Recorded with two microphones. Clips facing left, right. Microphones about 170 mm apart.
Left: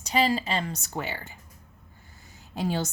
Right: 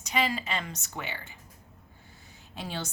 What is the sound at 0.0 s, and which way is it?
A woman's voice, 35° left (ahead or behind).